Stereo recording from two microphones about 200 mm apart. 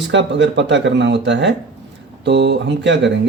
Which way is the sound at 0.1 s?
65° right (ahead or behind).